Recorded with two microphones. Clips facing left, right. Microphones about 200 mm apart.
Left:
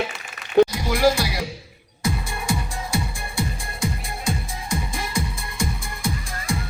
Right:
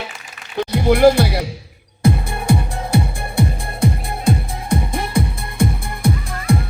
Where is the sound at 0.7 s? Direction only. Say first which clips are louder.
Right 8 dB; 60° right (ahead or behind).